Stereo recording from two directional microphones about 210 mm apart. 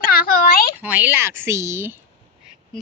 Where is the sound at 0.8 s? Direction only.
5° right (ahead or behind).